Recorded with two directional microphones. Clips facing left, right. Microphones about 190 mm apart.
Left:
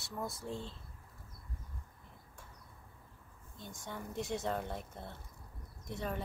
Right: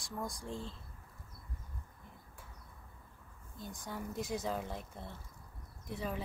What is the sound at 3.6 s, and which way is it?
Speech, centre (ahead or behind).